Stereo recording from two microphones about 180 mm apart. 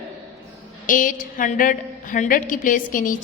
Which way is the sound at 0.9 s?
50° left (ahead or behind).